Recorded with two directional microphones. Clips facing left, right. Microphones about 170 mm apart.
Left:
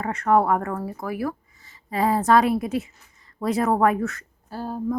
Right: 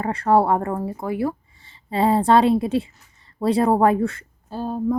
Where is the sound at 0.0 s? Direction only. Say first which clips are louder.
Right 2 dB; 30° right (ahead or behind).